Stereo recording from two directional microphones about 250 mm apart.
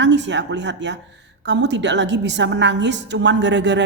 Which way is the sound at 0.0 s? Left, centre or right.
Right.